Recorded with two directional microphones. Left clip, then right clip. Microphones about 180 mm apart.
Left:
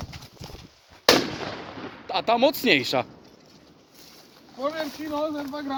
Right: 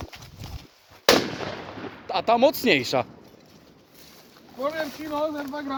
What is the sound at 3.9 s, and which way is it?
Boat, 25° right (ahead or behind).